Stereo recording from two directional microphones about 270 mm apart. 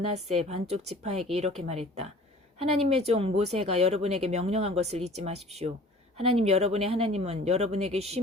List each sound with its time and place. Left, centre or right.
0.3 s speech: right